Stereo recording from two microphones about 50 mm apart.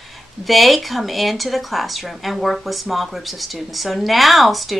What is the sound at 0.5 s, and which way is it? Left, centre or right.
Speech, centre.